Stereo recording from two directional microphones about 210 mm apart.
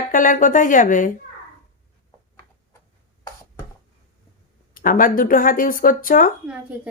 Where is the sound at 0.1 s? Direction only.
40° left (ahead or behind).